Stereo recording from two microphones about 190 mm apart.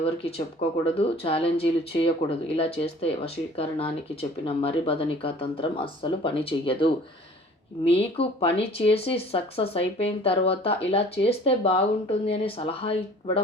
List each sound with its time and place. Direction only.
0.0 s speech: 30° left (ahead or behind)